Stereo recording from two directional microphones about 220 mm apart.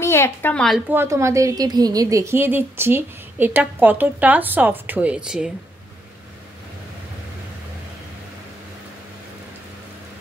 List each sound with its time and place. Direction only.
0.0 s a woman's voice: 10° left (ahead or behind)